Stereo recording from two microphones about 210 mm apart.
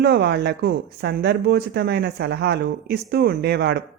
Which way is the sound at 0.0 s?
50° right (ahead or behind).